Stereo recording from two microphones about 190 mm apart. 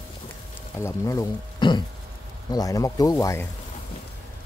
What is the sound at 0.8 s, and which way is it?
Speech, 15° left (ahead or behind).